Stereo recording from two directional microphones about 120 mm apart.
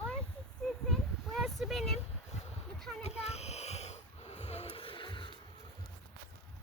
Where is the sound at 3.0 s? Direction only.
60° left (ahead or behind); by 5.3 s 45° left (ahead or behind).